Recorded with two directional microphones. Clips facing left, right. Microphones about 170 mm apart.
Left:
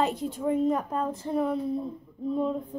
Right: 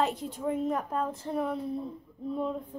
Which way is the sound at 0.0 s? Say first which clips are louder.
Left 3 dB; centre (ahead or behind).